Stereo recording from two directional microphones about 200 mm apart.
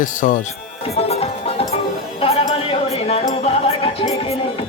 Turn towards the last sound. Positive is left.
turn(degrees=30)  # may be behind; listen again after turning